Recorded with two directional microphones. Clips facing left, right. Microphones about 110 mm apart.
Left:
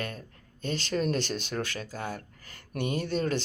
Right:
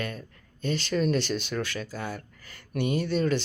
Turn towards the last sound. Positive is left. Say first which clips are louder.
# right 3 dB
turn(degrees=40)  # may be behind; listen again after turning